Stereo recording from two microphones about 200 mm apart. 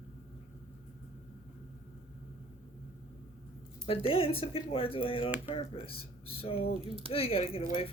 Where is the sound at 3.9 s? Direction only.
30° left (ahead or behind).